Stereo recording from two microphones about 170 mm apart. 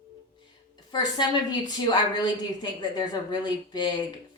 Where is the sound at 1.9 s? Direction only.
25° left (ahead or behind).